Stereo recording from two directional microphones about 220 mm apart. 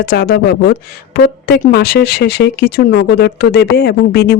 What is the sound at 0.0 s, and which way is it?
Speech, 45° left (ahead or behind).